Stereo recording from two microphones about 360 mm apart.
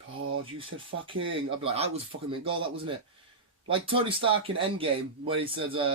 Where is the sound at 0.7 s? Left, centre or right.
Right.